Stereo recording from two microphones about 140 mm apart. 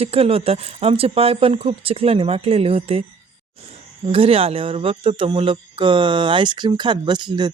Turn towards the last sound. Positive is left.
turn(degrees=-35)  # may be behind; listen again after turning